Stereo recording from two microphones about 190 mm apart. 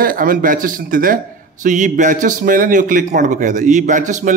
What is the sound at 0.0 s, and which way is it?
Speech, 50° right (ahead or behind).